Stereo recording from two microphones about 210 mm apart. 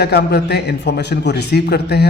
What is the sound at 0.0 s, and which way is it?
Speech, 50° left (ahead or behind).